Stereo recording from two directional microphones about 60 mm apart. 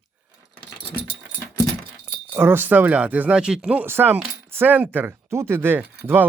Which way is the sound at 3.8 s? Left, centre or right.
Right.